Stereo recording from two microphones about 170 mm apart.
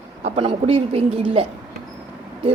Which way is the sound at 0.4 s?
30° right (ahead or behind).